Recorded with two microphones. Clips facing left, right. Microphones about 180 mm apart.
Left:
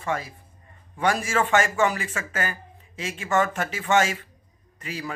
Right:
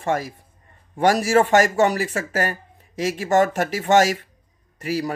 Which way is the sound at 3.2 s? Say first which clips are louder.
Right 5 dB; 40° right (ahead or behind).